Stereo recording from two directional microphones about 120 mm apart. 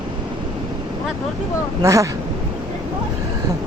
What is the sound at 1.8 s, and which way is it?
Speech, 25° right (ahead or behind).